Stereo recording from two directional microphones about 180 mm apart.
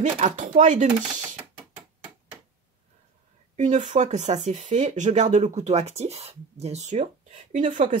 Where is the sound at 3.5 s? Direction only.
40° right (ahead or behind).